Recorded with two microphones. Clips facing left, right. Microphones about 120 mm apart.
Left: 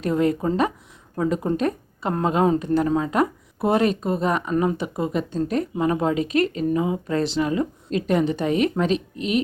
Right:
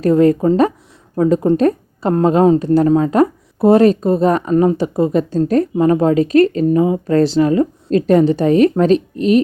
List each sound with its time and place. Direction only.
0.0 s a woman's voice: 35° right (ahead or behind)